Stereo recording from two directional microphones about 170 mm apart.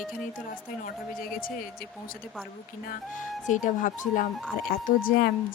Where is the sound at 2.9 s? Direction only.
50° left (ahead or behind).